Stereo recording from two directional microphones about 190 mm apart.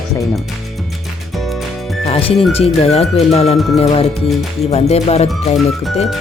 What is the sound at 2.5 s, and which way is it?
Speech, 30° left (ahead or behind).